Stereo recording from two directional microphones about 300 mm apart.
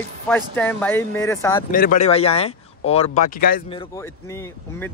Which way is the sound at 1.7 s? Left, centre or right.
Left.